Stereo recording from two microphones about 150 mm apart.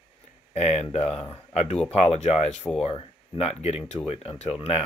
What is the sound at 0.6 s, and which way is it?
Speech, 45° left (ahead or behind).